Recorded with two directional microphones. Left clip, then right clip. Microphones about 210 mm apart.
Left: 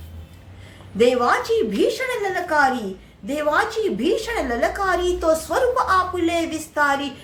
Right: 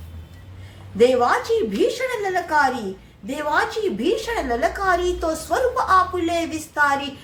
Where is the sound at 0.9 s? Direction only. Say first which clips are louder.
Right 1 dB; 10° left (ahead or behind).